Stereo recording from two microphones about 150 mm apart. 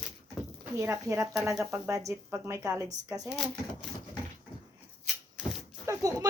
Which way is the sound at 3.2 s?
Centre (ahead or behind).